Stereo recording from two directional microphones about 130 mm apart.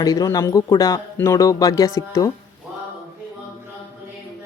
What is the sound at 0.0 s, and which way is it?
Speech, 30° left (ahead or behind).